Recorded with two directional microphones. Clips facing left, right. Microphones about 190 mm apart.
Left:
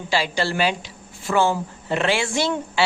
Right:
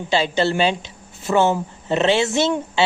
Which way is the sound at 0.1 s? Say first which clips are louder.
Right 4 dB; 25° right (ahead or behind).